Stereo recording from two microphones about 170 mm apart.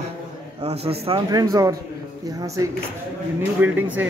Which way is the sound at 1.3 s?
20° right (ahead or behind).